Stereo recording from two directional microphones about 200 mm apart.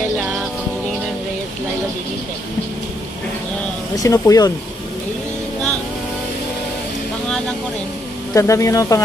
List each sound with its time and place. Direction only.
3.9 s speech: 15° left (ahead or behind)
8.4 s speech: 15° left (ahead or behind)